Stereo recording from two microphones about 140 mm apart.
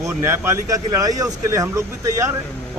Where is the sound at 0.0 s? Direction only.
20° right (ahead or behind).